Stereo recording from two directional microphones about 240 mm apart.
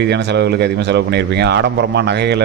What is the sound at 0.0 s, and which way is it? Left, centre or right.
Speech, right.